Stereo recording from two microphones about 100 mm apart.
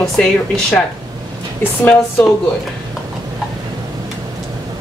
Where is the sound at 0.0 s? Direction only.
5° left (ahead or behind).